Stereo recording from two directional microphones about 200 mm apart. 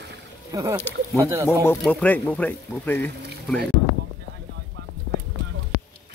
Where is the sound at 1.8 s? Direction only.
10° left (ahead or behind).